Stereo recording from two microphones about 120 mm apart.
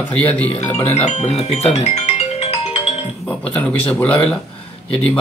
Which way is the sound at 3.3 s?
15° left (ahead or behind).